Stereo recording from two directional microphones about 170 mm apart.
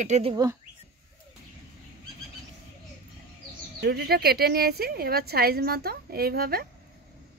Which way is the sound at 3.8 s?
70° right (ahead or behind).